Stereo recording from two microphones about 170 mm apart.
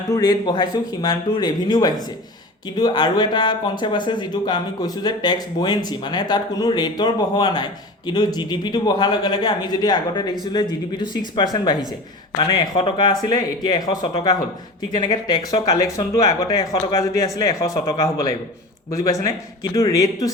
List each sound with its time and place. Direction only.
0.1 s speech: 25° left (ahead or behind)